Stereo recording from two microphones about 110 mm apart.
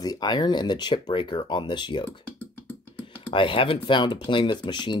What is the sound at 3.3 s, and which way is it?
Speech, 50° left (ahead or behind).